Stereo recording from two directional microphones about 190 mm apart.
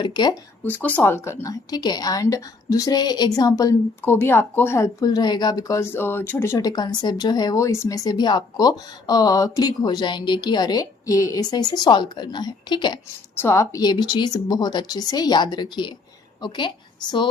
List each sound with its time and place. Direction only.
0.0 s a woman's voice: 25° left (ahead or behind)
0.6 s a woman's voice: 10° left (ahead or behind); by 17.2 s 25° left (ahead or behind)